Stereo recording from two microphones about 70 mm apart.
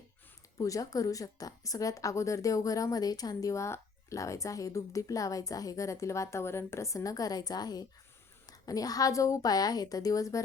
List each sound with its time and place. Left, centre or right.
0.6 s a woman's voice: left
8.4 s a woman's voice: left